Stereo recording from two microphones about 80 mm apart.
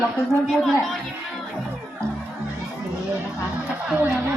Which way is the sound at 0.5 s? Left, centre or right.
Centre.